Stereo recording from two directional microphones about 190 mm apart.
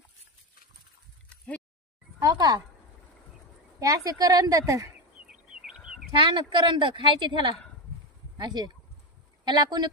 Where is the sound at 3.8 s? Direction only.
20° right (ahead or behind).